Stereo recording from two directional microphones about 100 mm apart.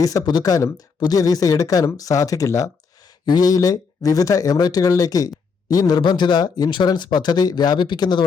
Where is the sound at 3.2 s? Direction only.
45° left (ahead or behind).